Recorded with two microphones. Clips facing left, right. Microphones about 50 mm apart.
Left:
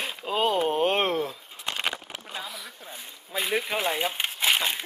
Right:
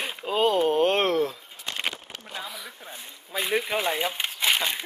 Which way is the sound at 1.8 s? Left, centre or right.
Centre.